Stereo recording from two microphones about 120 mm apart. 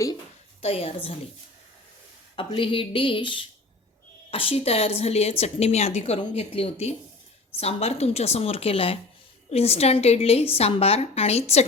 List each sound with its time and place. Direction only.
0.6 s speech: 55° left (ahead or behind)
2.3 s a woman's voice: 45° left (ahead or behind)